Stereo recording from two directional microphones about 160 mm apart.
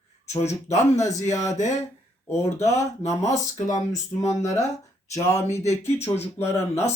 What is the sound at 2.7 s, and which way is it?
Speech, 45° left (ahead or behind).